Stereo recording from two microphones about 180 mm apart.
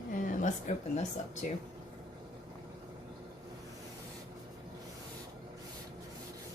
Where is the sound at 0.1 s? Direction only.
45° left (ahead or behind).